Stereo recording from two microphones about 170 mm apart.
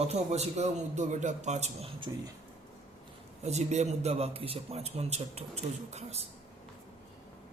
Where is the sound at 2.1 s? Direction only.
25° right (ahead or behind).